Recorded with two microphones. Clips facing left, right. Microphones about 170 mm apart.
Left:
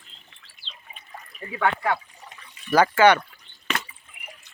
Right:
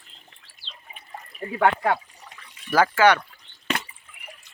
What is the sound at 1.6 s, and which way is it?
Speech, 40° right (ahead or behind).